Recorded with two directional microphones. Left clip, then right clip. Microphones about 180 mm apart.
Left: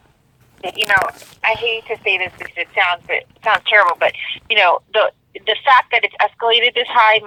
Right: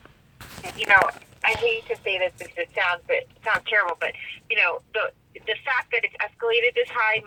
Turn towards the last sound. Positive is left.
turn(degrees=60)  # may be behind; listen again after turning